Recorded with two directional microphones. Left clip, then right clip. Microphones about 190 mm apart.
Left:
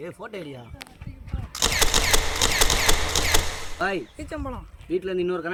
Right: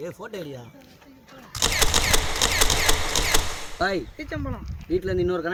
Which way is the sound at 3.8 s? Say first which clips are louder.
Right 1 dB; 5° left (ahead or behind).